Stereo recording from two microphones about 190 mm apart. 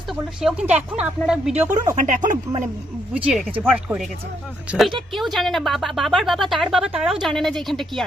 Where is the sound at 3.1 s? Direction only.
5° right (ahead or behind).